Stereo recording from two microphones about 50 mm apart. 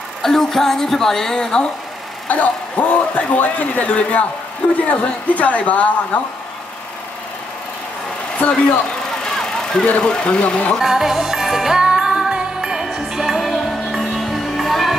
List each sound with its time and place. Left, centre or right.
0.2 s a woman's voice: centre
2.2 s a woman's voice: left
8.4 s a woman's voice: left
9.2 s vehicle: centre
9.8 s a woman's voice: left
10.8 s music: centre